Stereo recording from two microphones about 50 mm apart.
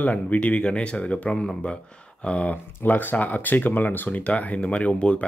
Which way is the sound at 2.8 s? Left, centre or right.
Left.